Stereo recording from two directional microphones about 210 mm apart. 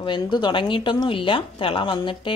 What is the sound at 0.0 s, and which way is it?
Speech, 20° left (ahead or behind).